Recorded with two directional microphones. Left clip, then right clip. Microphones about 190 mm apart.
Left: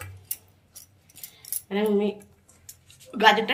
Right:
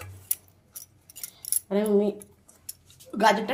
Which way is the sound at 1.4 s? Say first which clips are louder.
Even; 55° right (ahead or behind).